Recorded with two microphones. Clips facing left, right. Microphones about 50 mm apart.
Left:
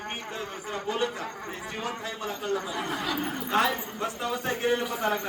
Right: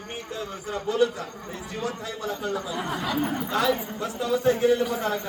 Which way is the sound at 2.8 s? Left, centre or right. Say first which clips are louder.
Right 3 dB; centre.